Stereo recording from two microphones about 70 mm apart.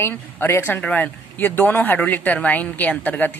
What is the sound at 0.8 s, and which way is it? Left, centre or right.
Speech, left.